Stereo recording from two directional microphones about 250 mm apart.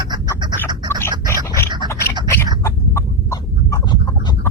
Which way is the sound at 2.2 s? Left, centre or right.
Centre.